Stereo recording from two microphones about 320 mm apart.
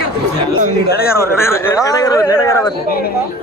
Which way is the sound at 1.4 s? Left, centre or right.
Centre.